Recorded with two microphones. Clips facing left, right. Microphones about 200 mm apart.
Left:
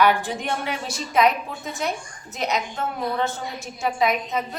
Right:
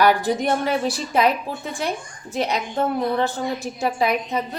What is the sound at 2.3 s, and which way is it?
A woman's voice, 30° right (ahead or behind).